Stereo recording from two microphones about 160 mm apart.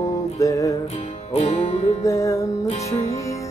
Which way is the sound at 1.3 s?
40° left (ahead or behind).